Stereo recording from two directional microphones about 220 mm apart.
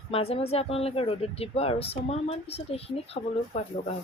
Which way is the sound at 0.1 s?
25° left (ahead or behind).